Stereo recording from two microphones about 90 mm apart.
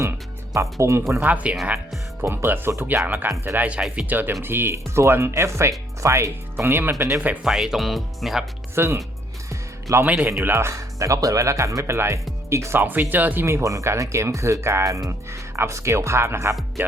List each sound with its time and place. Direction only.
0.5 s speech: 35° right (ahead or behind)
1.2 s speech: 15° right (ahead or behind)
7.4 s speech: 5° right (ahead or behind)
8.7 s speech: 30° right (ahead or behind)